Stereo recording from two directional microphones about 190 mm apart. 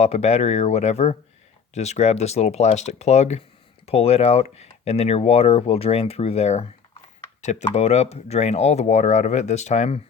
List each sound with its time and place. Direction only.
0.0 s speech: 35° left (ahead or behind)